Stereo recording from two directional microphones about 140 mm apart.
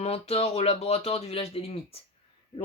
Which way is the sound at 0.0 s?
45° left (ahead or behind).